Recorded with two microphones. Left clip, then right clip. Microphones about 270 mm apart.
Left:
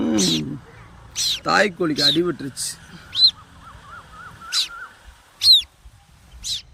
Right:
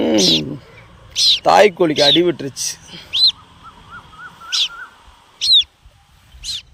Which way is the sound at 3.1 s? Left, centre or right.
Centre.